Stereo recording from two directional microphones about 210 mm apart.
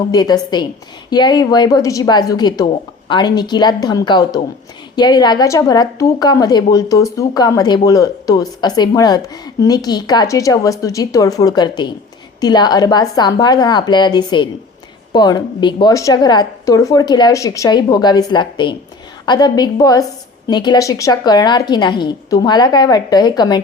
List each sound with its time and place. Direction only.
0.1 s a woman's voice: 20° left (ahead or behind)